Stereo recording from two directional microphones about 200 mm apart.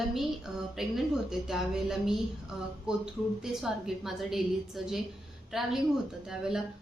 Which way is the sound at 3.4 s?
Centre (ahead or behind).